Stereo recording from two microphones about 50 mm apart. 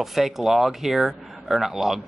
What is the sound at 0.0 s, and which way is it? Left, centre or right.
Speech, centre.